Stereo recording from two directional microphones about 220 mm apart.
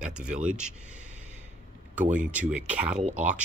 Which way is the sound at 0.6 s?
5° right (ahead or behind).